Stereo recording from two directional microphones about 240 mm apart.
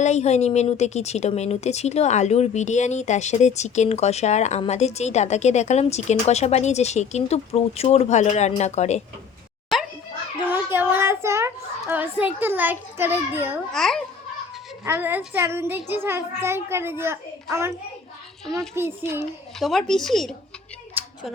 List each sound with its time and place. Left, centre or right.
0.0 s a woman's voice: left
9.7 s children playing: centre
10.4 s a child's voice: centre
19.2 s speech: centre
21.0 s a sound: centre